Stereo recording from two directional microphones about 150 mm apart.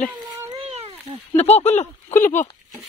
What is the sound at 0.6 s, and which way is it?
Cat, 45° right (ahead or behind).